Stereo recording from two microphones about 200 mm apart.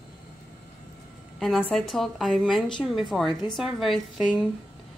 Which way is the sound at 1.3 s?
Centre (ahead or behind).